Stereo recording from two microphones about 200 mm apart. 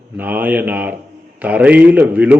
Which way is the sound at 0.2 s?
10° right (ahead or behind).